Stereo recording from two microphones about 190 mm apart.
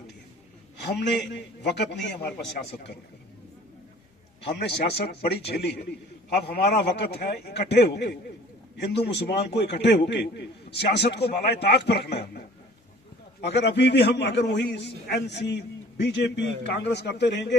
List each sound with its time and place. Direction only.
0.9 s a man's voice: 65° left (ahead or behind)
4.5 s a man's voice: 60° left (ahead or behind)
13.4 s a man's voice: 65° left (ahead or behind)